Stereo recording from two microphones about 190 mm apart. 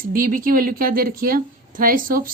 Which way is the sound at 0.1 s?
45° right (ahead or behind).